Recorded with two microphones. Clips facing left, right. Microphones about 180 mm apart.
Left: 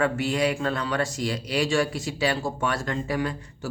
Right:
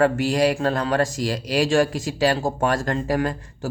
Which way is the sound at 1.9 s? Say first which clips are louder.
Right 4 dB; 90° right.